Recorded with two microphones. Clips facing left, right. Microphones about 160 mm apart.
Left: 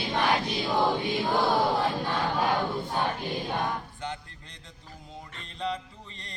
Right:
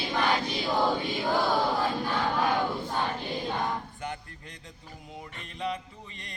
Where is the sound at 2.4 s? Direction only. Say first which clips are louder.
Even; centre (ahead or behind).